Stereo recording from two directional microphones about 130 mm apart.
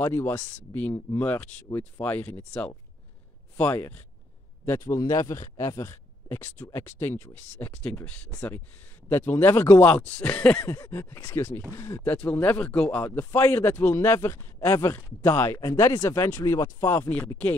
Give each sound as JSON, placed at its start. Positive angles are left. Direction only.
{"t": 0.0, "sound": "speech", "side_deg": 15}
{"t": 9.1, "sound": "speech", "side_deg": 15}
{"t": 10.7, "sound": "speech", "side_deg": 20}
{"t": 15.6, "sound": "speech", "side_deg": 30}